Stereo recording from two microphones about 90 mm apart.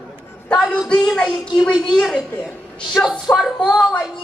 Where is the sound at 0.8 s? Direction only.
5° left (ahead or behind).